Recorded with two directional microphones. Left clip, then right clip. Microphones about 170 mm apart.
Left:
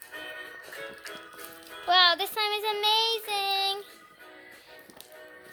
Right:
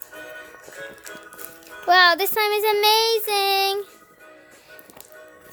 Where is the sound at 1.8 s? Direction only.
65° right (ahead or behind).